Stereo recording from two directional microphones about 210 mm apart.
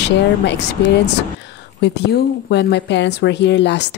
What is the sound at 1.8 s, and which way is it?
Speech, 55° left (ahead or behind).